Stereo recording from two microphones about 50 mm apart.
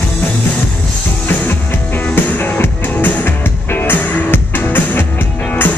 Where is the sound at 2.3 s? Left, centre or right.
Left.